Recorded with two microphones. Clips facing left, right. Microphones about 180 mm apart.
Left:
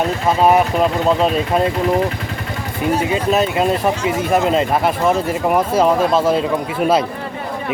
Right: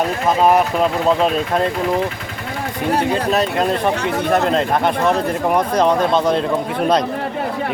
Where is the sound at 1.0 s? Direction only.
Centre (ahead or behind).